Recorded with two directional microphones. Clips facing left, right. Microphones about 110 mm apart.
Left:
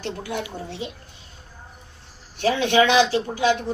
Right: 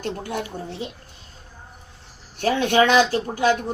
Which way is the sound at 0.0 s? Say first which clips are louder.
Right 1 dB; 45° right (ahead or behind).